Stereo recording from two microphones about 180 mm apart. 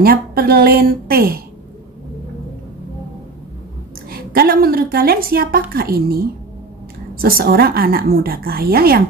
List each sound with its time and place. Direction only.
0.0 s a woman's voice: 55° right (ahead or behind)
4.1 s a woman's voice: 55° right (ahead or behind)